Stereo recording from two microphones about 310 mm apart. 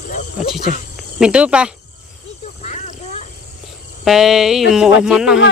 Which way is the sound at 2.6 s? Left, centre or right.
Left.